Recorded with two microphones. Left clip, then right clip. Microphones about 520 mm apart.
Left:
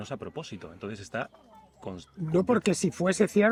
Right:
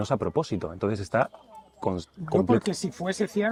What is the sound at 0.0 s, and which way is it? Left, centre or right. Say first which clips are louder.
Speech: right 11 dB; right.